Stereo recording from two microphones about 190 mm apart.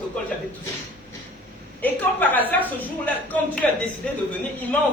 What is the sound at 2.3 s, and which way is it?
A man's voice, 10° left (ahead or behind).